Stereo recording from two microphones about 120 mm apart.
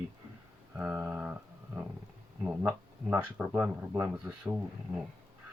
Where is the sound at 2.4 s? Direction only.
15° right (ahead or behind).